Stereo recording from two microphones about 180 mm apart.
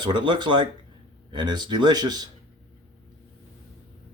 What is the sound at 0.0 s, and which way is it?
Speech, 25° right (ahead or behind).